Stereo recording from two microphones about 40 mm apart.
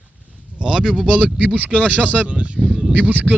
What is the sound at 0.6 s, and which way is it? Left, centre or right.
Speech, right.